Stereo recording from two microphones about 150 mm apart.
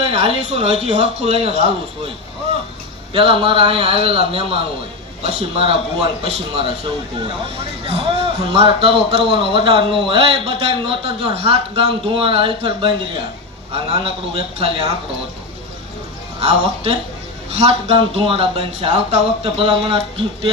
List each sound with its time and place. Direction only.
0.0 s speech: 40° right (ahead or behind)
3.1 s a man's voice: 35° right (ahead or behind)
7.9 s a man's voice: 40° right (ahead or behind)
16.4 s a man's voice: 45° right (ahead or behind)